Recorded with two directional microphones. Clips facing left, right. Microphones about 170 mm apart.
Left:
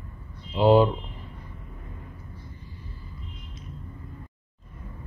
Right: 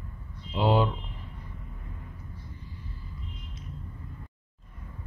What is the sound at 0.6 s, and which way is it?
Speech, 40° left (ahead or behind).